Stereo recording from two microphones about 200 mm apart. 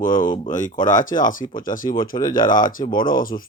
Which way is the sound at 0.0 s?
40° left (ahead or behind).